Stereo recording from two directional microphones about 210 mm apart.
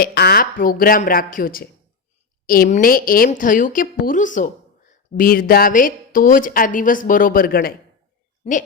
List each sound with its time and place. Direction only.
0.0 s a woman's voice: 50° left (ahead or behind)